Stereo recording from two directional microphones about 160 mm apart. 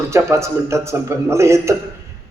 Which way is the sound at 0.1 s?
15° right (ahead or behind).